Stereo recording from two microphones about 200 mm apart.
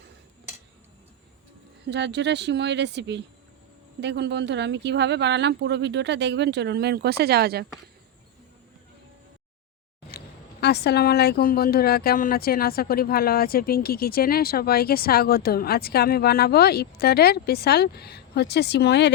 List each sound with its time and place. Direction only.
1.9 s speech: 60° right (ahead or behind)
10.1 s speech: 55° left (ahead or behind)